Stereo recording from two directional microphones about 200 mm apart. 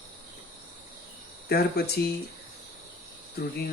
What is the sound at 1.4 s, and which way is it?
Speech, 50° left (ahead or behind).